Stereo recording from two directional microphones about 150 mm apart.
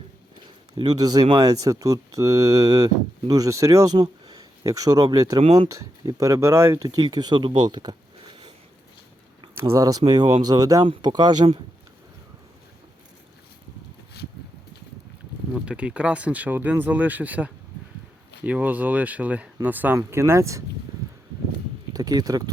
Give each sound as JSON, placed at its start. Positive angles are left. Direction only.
{"t": 0.8, "sound": "speech", "side_deg": -25}
{"t": 5.4, "sound": "speech", "side_deg": -40}
{"t": 5.6, "sound": "speech", "side_deg": -20}
{"t": 9.6, "sound": "speech", "side_deg": -20}
{"t": 15.5, "sound": "speech", "side_deg": -10}
{"t": 21.0, "sound": "a sound", "side_deg": -20}
{"t": 21.9, "sound": "speech", "side_deg": -25}